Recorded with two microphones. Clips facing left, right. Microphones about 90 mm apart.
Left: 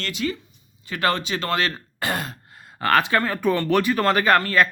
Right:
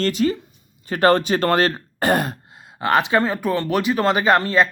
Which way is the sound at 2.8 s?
20° right (ahead or behind).